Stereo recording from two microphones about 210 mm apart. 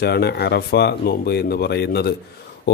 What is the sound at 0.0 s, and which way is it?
A man's voice, 50° left (ahead or behind).